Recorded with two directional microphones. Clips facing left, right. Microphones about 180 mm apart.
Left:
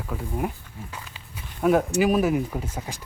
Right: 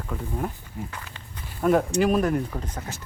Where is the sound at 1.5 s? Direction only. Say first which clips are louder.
Left 1 dB; centre (ahead or behind).